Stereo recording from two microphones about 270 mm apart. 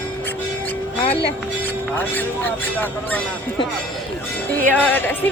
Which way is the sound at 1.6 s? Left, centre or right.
Centre.